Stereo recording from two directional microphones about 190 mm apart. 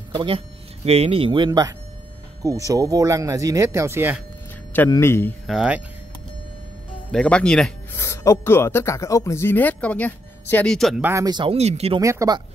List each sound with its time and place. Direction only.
0.1 s a sound: 25° right (ahead or behind)
0.8 s speech: 30° right (ahead or behind); by 4.2 s 10° right (ahead or behind)
4.7 s speech: 15° left (ahead or behind)
5.5 s speech: 5° right (ahead or behind)
7.1 s speech: 5° left (ahead or behind)
8.0 s speech: 15° left (ahead or behind)
11.1 s speech: 20° right (ahead or behind)
12.0 s speech: 15° right (ahead or behind)